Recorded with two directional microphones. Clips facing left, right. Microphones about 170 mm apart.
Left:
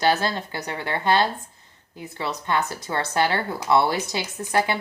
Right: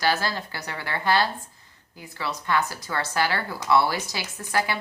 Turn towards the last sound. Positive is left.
turn(degrees=25)  # may be behind; listen again after turning